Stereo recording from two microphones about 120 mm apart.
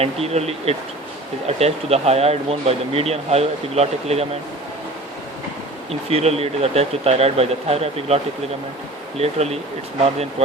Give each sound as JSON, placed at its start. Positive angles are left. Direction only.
{"t": 0.0, "sound": "speech", "side_deg": -60}
{"t": 5.9, "sound": "speech", "side_deg": -60}